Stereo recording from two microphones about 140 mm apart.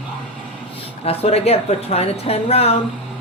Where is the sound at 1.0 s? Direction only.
45° left (ahead or behind).